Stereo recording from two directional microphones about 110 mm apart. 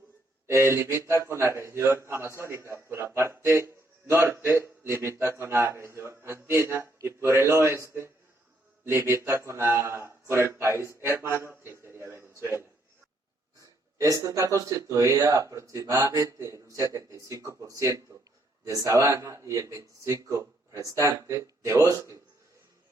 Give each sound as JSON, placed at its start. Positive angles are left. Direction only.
{"t": 0.4, "sound": "a man's voice", "side_deg": -25}
{"t": 14.0, "sound": "a man's voice", "side_deg": -30}